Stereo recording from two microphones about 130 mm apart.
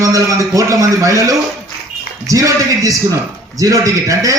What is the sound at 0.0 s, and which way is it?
A man's voice, 25° right (ahead or behind).